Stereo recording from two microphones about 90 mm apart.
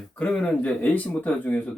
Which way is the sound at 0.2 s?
15° left (ahead or behind).